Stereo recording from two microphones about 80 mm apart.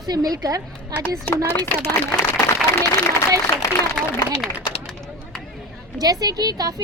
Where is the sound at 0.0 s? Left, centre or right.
Right.